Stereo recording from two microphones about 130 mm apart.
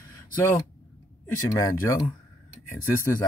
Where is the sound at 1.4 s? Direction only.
25° left (ahead or behind).